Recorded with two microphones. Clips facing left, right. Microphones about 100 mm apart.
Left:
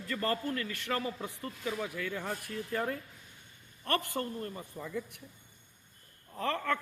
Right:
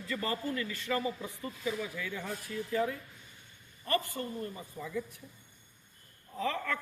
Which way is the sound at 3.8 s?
70° left (ahead or behind).